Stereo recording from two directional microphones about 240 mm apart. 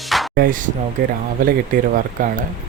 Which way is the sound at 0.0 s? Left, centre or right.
Centre.